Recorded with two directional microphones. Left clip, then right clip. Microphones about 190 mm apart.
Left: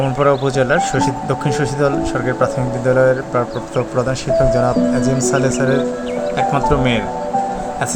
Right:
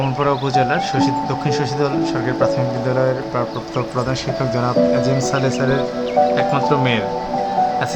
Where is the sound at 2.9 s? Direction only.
15° left (ahead or behind).